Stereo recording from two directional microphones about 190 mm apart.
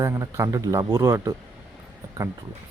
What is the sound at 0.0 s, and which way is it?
Speech, 15° right (ahead or behind).